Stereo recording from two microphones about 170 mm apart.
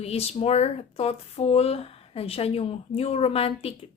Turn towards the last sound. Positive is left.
turn(degrees=35)  # may be behind; listen again after turning